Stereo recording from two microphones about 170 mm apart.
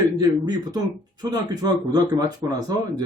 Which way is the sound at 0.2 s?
25° right (ahead or behind).